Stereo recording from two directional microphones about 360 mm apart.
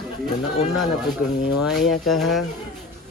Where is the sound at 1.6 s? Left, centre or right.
Centre.